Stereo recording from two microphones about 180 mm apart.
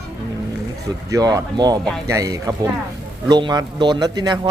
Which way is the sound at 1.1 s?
20° right (ahead or behind).